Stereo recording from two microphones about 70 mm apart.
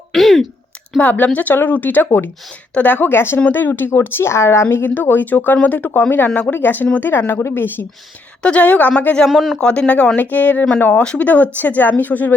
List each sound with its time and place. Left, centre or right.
0.1 s a sound: centre
0.9 s a woman's voice: left
8.4 s speech: centre
9.2 s speech: centre
9.6 s speech: centre